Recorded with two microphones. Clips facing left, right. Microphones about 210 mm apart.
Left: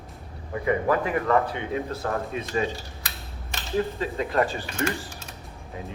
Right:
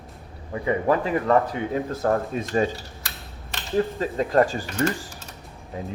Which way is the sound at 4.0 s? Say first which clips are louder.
Right 4 dB; 40° right (ahead or behind).